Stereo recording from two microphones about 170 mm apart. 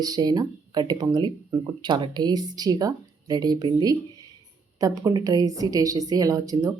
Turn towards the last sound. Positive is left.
turn(degrees=-20)  # may be behind; listen again after turning